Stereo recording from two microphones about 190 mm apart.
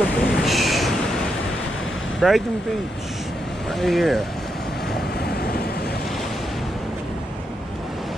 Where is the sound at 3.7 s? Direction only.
Centre (ahead or behind).